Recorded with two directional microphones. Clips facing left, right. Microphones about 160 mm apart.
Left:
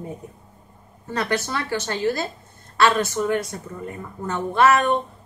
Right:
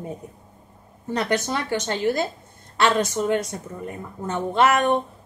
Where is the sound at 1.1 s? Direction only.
20° right (ahead or behind).